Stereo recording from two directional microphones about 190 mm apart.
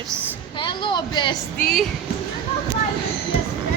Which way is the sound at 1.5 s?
5° left (ahead or behind).